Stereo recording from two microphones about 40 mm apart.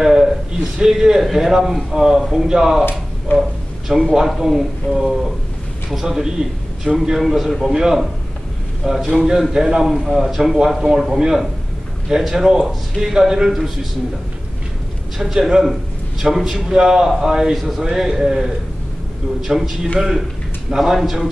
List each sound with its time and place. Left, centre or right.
0.0 s a sound: centre
0.7 s a man's voice: centre
3.3 s a man's voice: left
3.9 s a man's voice: centre
7.0 s a man's voice: centre
7.7 s a man's voice: centre
9.1 s a man's voice: centre
15.1 s a man's voice: centre
17.6 s a man's voice: centre